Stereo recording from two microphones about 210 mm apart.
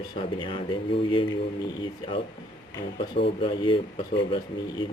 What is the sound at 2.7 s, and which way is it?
Speech, 25° left (ahead or behind).